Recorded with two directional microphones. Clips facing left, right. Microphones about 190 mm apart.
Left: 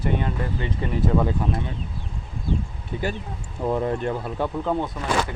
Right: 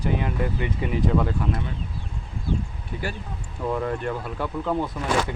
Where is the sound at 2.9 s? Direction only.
25° left (ahead or behind).